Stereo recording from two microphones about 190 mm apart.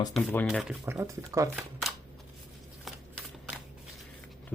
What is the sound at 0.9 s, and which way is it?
Speech, 15° right (ahead or behind).